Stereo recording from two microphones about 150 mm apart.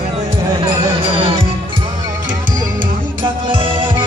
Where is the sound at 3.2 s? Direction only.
35° right (ahead or behind).